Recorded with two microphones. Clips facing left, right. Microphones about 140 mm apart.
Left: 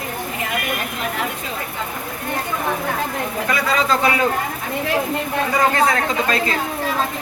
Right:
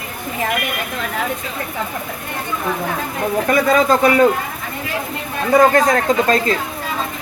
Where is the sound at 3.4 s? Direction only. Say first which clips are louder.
Right 6 dB; 50° right (ahead or behind).